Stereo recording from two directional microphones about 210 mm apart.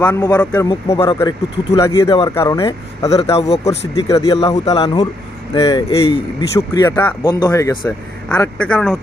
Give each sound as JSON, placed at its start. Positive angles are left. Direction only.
{"t": 0.0, "sound": "speech", "side_deg": 5}
{"t": 3.2, "sound": "speech", "side_deg": 30}
{"t": 3.7, "sound": "a man's voice", "side_deg": 15}